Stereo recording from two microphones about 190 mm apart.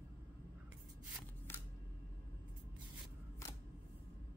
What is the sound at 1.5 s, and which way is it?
Single-lens reflex camera, 10° left (ahead or behind).